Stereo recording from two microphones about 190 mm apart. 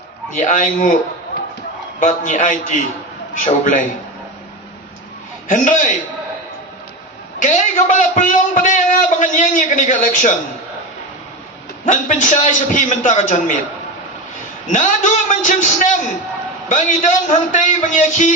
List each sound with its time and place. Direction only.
0.3 s a man's voice: 40° left (ahead or behind)
2.0 s a man's voice: 40° left (ahead or behind)
5.5 s a man's voice: 45° left (ahead or behind)
7.3 s a man's voice: 40° left (ahead or behind)
11.9 s a man's voice: 40° left (ahead or behind)
14.7 s a man's voice: 40° left (ahead or behind)